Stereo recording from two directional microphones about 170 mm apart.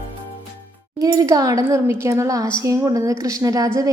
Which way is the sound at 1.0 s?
20° right (ahead or behind).